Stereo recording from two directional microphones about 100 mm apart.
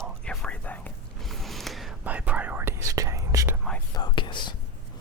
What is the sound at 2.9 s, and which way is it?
Whispering, 35° right (ahead or behind).